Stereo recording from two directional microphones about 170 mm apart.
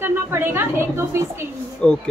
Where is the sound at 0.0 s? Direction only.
15° right (ahead or behind).